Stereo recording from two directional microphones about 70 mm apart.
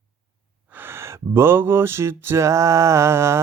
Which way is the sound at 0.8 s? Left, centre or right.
Right.